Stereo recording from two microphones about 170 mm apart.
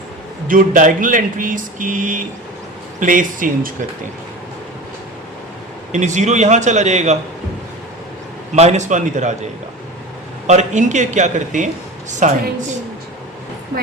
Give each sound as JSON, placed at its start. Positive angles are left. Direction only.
{"t": 0.4, "sound": "a man's voice", "side_deg": -50}
{"t": 5.9, "sound": "a man's voice", "side_deg": -45}
{"t": 8.5, "sound": "a man's voice", "side_deg": -40}
{"t": 10.4, "sound": "a man's voice", "side_deg": -45}